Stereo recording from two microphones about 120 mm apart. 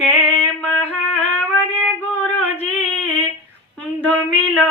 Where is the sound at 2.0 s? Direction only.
15° left (ahead or behind).